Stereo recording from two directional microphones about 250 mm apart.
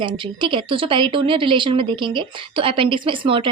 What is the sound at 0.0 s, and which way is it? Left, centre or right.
A woman's voice, centre.